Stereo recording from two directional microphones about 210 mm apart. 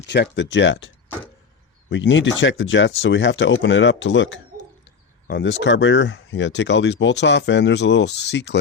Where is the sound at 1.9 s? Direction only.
60° left (ahead or behind).